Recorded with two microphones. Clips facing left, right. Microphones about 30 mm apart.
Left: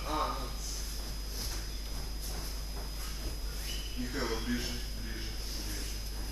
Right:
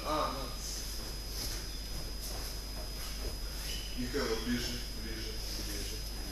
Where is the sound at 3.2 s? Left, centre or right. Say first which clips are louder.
Even; centre.